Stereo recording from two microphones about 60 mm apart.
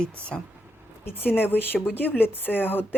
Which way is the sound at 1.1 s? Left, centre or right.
Left.